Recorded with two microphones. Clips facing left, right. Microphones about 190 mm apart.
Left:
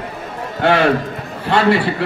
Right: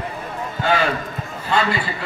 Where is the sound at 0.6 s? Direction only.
65° left (ahead or behind).